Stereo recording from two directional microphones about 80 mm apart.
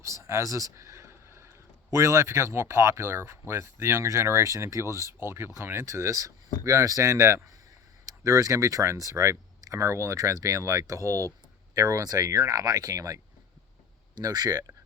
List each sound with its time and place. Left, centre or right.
0.0 s a sound: right
1.9 s speech: right
14.2 s speech: right